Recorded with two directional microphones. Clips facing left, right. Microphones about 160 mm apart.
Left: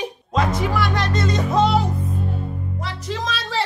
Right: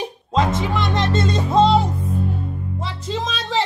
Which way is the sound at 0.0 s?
25° right (ahead or behind).